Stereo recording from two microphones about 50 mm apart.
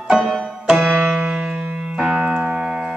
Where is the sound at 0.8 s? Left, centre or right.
Right.